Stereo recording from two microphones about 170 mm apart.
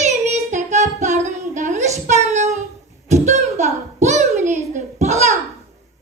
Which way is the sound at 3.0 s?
40° right (ahead or behind).